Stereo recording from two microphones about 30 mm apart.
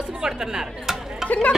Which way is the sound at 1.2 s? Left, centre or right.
Left.